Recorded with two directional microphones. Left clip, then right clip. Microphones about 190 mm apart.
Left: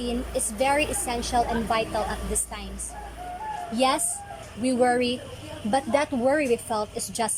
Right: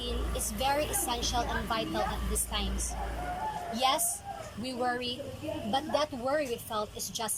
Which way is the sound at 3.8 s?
20° left (ahead or behind).